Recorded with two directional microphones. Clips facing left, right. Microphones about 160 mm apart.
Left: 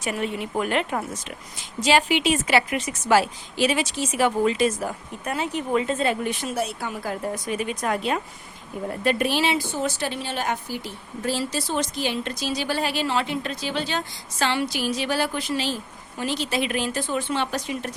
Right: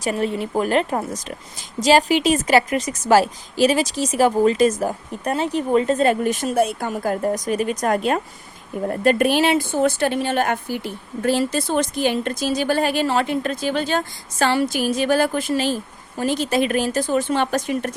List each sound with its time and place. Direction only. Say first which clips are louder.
0.0 s a woman's voice: right 5 dB; 35° right (ahead or behind)